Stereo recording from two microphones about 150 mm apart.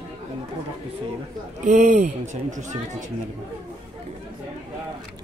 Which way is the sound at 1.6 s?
55° right (ahead or behind).